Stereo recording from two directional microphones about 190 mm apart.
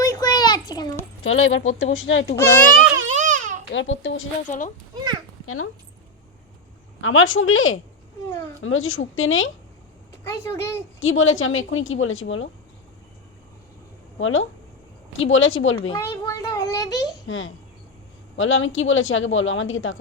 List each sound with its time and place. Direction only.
0.0 s a sound: 20° left (ahead or behind)
1.2 s speech: 90° left
3.1 s babbling: 40° right (ahead or behind)
3.7 s a child's voice: 80° left
4.5 s speech: 40° left (ahead or behind)
7.0 s speech: 90° left
8.3 s a child's voice: 15° left (ahead or behind)
8.6 s speech: 90° left
10.2 s a child's voice: 15° left (ahead or behind)
11.0 s speech: 90° left
14.2 s speech: 90° left
15.9 s a child's voice: 20° left (ahead or behind)
17.2 s a child's voice: 90° left